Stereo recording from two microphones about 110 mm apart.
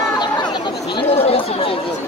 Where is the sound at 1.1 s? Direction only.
65° left (ahead or behind).